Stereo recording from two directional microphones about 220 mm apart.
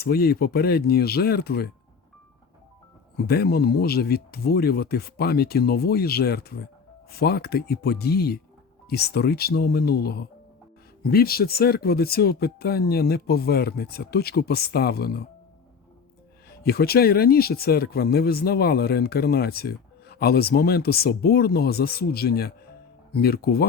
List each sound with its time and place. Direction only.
0.0 s speech: 45° left (ahead or behind)
3.2 s speech: 45° left (ahead or behind)
16.5 s speech: 45° left (ahead or behind)